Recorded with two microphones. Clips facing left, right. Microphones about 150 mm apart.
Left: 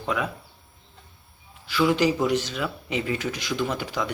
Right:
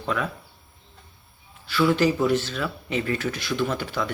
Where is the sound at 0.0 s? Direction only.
15° left (ahead or behind).